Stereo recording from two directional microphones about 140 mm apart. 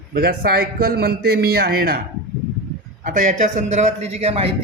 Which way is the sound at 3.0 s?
60° right (ahead or behind).